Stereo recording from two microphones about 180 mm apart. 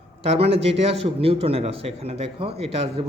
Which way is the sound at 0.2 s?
30° right (ahead or behind).